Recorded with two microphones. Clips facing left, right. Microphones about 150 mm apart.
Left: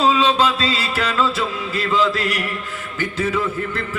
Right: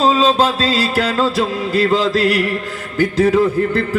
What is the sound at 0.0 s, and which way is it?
Speech, 35° right (ahead or behind).